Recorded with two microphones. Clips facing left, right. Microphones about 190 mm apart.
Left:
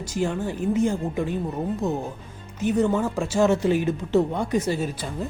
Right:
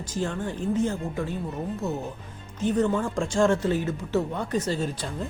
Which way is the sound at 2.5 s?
10° left (ahead or behind).